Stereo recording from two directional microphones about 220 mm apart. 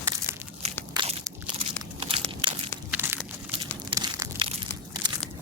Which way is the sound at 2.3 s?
25° right (ahead or behind).